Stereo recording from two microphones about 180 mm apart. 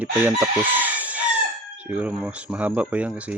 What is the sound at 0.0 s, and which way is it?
Chicken, 10° right (ahead or behind).